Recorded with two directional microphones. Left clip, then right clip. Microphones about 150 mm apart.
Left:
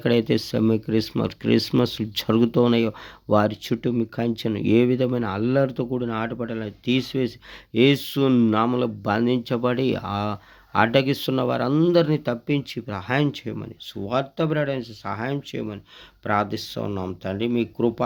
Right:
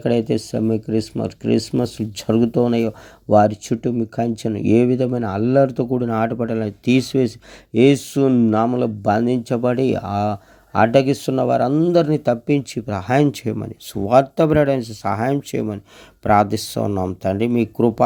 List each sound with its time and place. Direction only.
0.0 s speech: 5° right (ahead or behind); by 7.8 s 30° right (ahead or behind)
7.8 s speech: 20° right (ahead or behind)
11.7 s speech: 10° right (ahead or behind)
11.9 s speech: 20° right (ahead or behind); by 18.0 s 40° right (ahead or behind)